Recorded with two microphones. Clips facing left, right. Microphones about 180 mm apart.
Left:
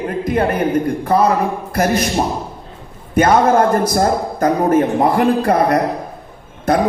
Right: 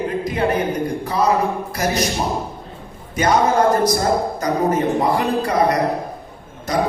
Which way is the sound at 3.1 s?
55° left (ahead or behind).